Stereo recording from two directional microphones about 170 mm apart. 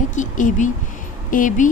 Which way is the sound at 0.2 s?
45° left (ahead or behind).